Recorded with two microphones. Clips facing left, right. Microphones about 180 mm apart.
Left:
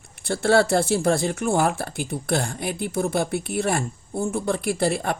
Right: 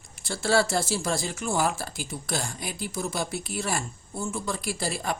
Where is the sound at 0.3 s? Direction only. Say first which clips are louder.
Left 6 dB; 60° left (ahead or behind).